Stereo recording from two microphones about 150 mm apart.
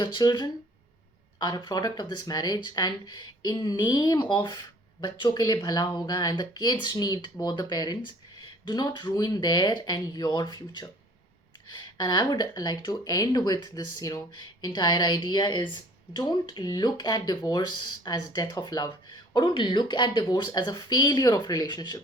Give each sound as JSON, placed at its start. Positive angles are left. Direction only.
{"t": 0.0, "sound": "speech", "side_deg": 30}